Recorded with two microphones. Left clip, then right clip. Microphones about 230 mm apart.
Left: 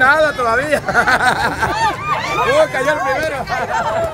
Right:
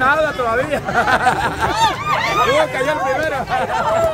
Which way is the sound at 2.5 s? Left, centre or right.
Centre.